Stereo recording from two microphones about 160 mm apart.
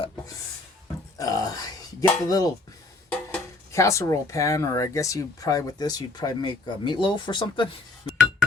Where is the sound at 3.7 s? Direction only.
20° left (ahead or behind).